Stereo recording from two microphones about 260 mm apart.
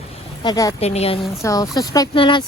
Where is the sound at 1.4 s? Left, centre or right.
Centre.